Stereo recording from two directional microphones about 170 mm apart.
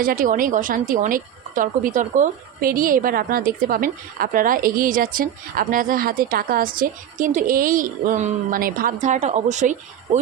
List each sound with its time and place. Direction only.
0.0 s a woman's voice: 55° right (ahead or behind)